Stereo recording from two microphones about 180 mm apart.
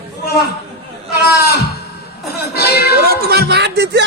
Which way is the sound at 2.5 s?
60° left (ahead or behind).